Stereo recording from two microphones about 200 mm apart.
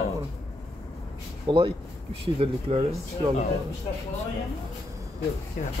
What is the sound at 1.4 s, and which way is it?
Speech, 25° right (ahead or behind).